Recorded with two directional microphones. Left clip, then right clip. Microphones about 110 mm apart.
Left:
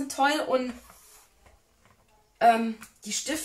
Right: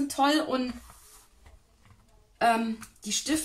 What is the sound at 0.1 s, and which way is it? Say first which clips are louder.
Speech: left 2 dB; 20° right (ahead or behind).